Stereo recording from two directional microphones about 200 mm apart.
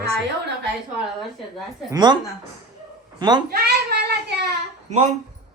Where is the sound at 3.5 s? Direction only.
50° right (ahead or behind).